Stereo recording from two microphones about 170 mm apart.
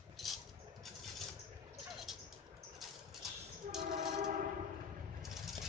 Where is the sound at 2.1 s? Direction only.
Centre (ahead or behind).